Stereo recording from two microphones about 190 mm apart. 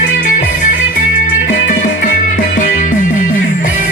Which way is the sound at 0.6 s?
45° left (ahead or behind).